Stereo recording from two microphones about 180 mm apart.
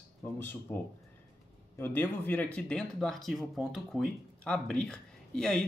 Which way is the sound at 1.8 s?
10° left (ahead or behind).